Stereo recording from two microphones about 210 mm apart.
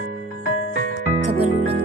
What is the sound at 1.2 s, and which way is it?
Music, 30° right (ahead or behind).